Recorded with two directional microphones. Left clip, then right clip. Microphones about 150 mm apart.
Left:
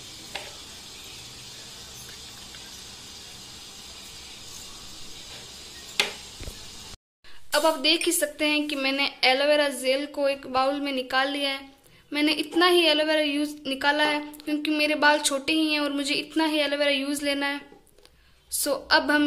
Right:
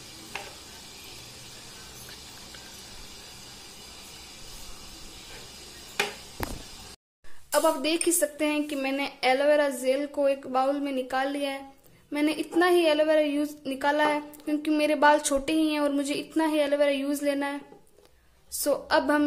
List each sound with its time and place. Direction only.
7.8 s a woman's voice: 20° right (ahead or behind)
18.6 s a woman's voice: 20° right (ahead or behind)